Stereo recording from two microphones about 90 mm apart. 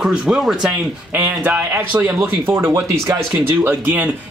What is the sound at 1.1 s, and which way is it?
Speech, 20° right (ahead or behind).